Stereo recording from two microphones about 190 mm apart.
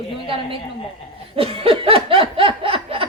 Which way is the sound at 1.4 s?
30° right (ahead or behind).